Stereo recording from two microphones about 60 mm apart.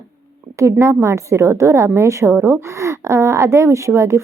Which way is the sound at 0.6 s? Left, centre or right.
Right.